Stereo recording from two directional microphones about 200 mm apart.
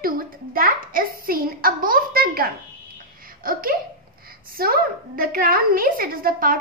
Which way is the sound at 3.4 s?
45° right (ahead or behind).